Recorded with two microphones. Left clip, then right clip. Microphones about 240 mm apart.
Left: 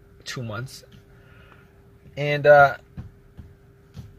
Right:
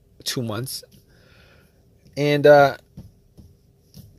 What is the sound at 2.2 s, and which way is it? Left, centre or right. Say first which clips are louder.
Speech: right 1 dB; right.